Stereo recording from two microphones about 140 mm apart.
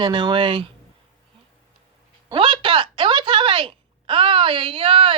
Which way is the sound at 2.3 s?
35° right (ahead or behind).